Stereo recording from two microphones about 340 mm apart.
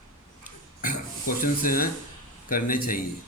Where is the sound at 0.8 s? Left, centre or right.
Left.